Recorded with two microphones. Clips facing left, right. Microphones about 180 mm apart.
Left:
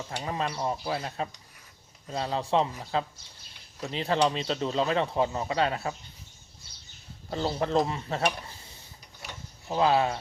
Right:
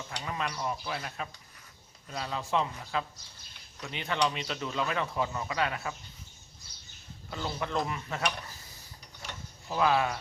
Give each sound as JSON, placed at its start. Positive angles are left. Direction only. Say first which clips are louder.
{"t": 0.1, "sound": "speech", "louder": "left 4 dB", "side_deg": 30}
{"t": 7.3, "sound": "speech", "louder": "left 7 dB", "side_deg": 35}